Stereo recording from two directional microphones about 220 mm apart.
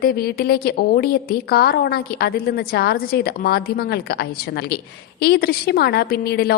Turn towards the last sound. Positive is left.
turn(degrees=45)  # may be behind; listen again after turning